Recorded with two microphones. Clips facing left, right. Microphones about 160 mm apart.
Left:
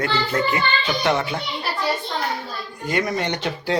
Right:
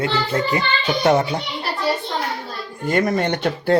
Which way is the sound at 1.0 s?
40° right (ahead or behind).